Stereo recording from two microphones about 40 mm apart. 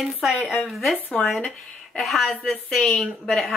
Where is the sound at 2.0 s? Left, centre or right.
Centre.